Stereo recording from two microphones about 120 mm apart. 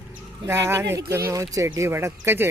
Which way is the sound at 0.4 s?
20° right (ahead or behind).